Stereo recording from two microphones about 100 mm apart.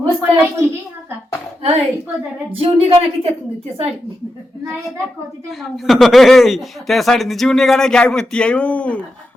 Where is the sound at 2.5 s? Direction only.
70° right (ahead or behind).